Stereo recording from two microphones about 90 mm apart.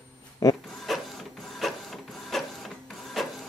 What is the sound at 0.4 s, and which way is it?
Speech, 35° left (ahead or behind).